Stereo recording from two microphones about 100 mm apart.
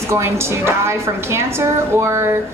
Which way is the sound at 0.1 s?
25° right (ahead or behind).